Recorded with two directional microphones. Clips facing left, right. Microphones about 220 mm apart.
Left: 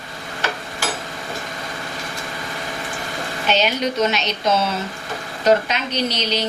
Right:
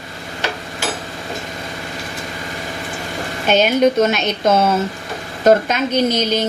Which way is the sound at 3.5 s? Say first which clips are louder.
Right 7 dB; 50° right (ahead or behind).